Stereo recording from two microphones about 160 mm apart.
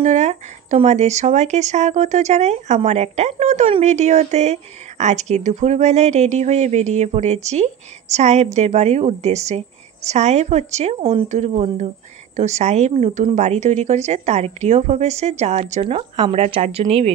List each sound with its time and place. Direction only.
0.0 s speech: 45° right (ahead or behind)